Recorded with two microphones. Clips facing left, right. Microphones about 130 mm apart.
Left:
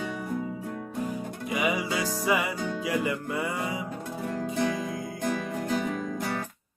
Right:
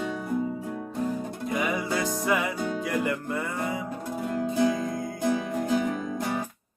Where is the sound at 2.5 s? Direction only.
10° right (ahead or behind).